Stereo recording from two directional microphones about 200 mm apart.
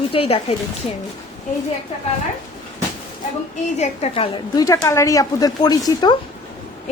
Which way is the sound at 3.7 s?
35° left (ahead or behind).